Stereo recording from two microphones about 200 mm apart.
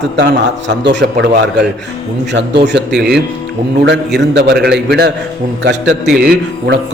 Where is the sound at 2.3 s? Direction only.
60° right (ahead or behind).